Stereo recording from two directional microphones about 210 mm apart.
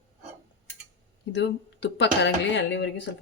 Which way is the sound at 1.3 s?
55° left (ahead or behind).